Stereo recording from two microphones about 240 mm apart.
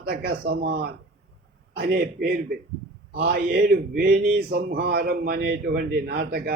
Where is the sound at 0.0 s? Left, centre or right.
Right.